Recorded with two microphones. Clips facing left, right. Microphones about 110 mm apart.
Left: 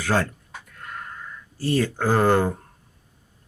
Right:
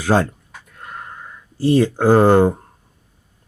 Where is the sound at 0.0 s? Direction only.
25° right (ahead or behind).